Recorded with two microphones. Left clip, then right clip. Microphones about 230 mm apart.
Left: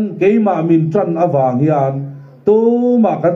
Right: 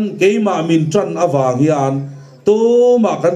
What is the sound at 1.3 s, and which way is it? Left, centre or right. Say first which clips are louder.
Speech: right 1 dB; right.